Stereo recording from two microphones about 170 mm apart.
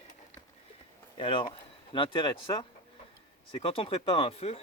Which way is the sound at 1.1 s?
30° left (ahead or behind).